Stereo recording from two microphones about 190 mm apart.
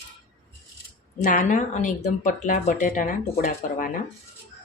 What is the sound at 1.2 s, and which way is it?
A woman's voice, 40° left (ahead or behind).